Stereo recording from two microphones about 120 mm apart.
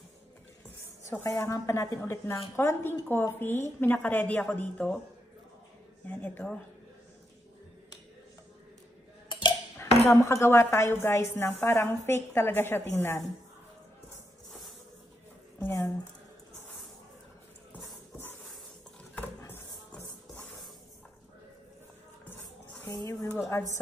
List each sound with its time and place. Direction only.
1.2 s a woman's voice: 25° left (ahead or behind); by 5.0 s 10° left (ahead or behind)
6.0 s a woman's voice: 15° left (ahead or behind)
9.3 s a sound: 40° left (ahead or behind)
10.0 s a woman's voice: 25° left (ahead or behind)
15.6 s a woman's voice: 15° left (ahead or behind)
19.1 s a sound: 15° left (ahead or behind)
22.8 s a woman's voice: 25° left (ahead or behind)